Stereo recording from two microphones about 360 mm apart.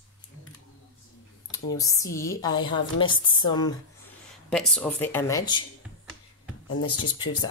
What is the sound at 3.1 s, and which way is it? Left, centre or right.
Speech, left.